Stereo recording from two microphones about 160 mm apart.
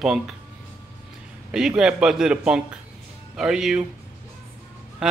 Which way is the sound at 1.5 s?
5° right (ahead or behind).